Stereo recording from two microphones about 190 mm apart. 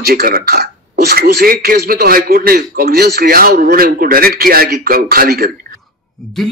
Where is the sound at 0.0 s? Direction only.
55° right (ahead or behind).